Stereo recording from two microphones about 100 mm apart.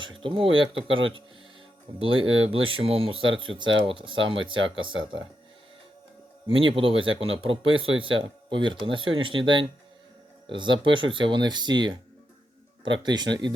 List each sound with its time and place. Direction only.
0.0 s speech: 55° right (ahead or behind)
2.0 s speech: 65° right (ahead or behind)
6.5 s speech: 60° right (ahead or behind)